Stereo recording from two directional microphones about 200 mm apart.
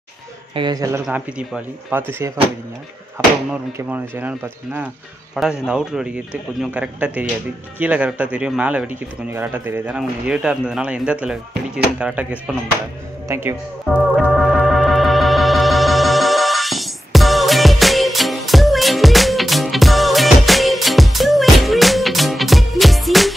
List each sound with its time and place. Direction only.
0.6 s speech: 20° right (ahead or behind)
1.0 s speech: 5° right (ahead or behind)
14.1 s music: centre (ahead or behind)